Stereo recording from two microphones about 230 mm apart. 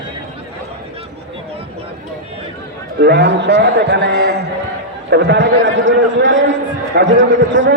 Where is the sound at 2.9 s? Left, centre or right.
Right.